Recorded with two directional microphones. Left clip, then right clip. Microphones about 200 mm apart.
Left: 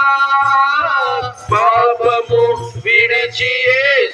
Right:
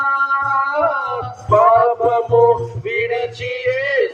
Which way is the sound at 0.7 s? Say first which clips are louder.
Left 3 dB; 55° right (ahead or behind).